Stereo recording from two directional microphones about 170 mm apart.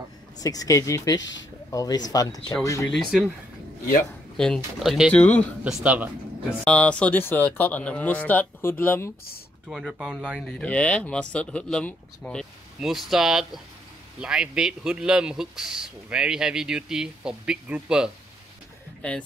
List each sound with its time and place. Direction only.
0.4 s speech: 20° left (ahead or behind)
4.4 s speech: centre (ahead or behind)
5.2 s speech: 10° left (ahead or behind)
5.6 s a man's voice: 5° right (ahead or behind)
6.6 s speech: 5° left (ahead or behind)
9.7 s speech: centre (ahead or behind)